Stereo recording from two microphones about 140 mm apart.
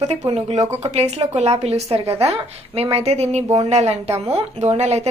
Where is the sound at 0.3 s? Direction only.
45° right (ahead or behind).